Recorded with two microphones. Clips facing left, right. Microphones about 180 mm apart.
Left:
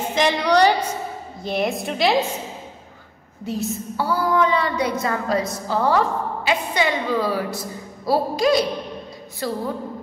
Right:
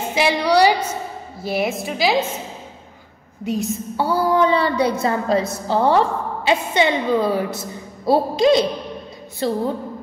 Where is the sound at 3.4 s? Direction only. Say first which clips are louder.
Right 3 dB; 15° right (ahead or behind).